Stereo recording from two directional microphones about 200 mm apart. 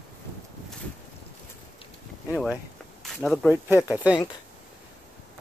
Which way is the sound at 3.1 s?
5° left (ahead or behind).